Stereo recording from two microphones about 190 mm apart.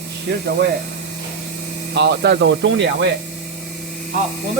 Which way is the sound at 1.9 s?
60° right (ahead or behind).